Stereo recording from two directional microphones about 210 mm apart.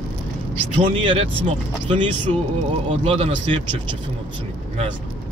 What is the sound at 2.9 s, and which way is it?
Speech, 30° right (ahead or behind).